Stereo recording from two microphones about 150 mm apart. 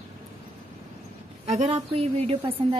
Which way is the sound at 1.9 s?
40° right (ahead or behind).